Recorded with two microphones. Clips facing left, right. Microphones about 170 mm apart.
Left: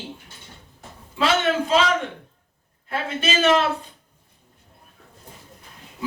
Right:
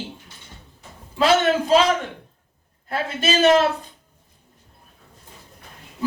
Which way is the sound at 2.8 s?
40° right (ahead or behind).